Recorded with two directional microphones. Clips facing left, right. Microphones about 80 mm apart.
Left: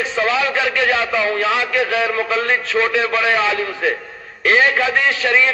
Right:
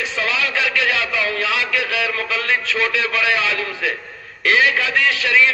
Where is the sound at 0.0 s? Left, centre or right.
Left.